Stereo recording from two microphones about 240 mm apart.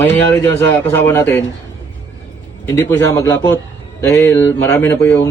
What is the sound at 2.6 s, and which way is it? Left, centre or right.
A man's voice, centre.